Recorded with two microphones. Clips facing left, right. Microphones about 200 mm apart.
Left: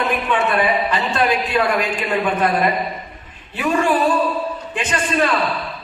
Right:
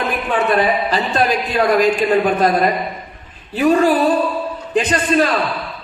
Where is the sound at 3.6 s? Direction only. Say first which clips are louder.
Right 4 dB; 35° right (ahead or behind).